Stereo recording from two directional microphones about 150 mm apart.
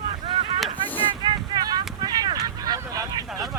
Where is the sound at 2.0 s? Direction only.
25° right (ahead or behind).